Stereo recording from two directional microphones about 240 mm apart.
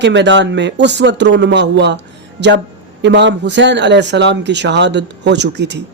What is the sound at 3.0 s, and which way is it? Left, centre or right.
Speech, right.